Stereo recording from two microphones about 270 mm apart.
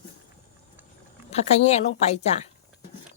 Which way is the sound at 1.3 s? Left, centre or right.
Left.